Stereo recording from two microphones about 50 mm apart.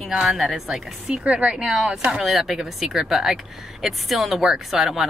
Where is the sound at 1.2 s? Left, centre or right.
Right.